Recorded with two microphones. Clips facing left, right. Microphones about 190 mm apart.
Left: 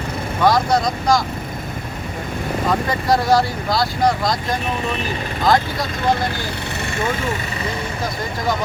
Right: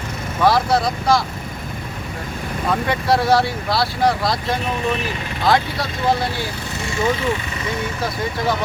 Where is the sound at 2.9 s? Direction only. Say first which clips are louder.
Right 1 dB; centre (ahead or behind).